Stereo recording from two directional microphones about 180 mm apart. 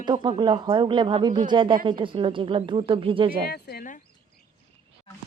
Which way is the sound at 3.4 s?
60° left (ahead or behind).